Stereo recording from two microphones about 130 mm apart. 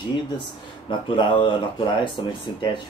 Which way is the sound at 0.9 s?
40° left (ahead or behind).